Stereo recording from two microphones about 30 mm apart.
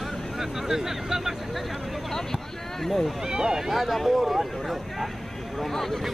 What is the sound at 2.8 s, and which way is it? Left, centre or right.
Speech, centre.